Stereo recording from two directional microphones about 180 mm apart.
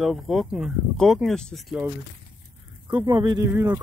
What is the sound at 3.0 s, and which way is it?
Speech, 20° right (ahead or behind).